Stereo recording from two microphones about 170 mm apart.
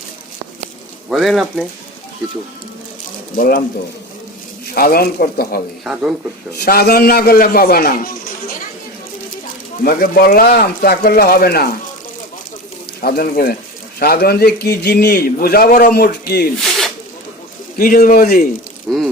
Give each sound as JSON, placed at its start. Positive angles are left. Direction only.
{"t": 1.1, "sound": "speech", "side_deg": 0}
{"t": 3.3, "sound": "a man's voice", "side_deg": 55}
{"t": 4.7, "sound": "a man's voice", "side_deg": 65}
{"t": 5.8, "sound": "speech", "side_deg": -5}
{"t": 6.6, "sound": "a man's voice", "side_deg": 65}
{"t": 9.8, "sound": "a man's voice", "side_deg": 60}
{"t": 13.0, "sound": "a man's voice", "side_deg": 60}
{"t": 16.6, "sound": "zipper", "side_deg": 0}
{"t": 17.7, "sound": "a man's voice", "side_deg": 55}
{"t": 18.9, "sound": "speech", "side_deg": -5}